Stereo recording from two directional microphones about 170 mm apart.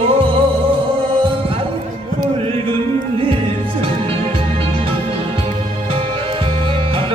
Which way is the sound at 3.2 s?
30° right (ahead or behind).